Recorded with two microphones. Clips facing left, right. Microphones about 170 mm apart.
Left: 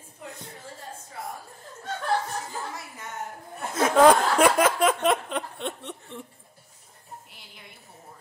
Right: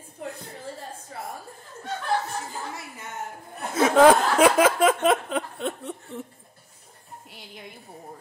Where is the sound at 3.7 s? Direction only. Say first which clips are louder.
Right 2 dB; 10° right (ahead or behind).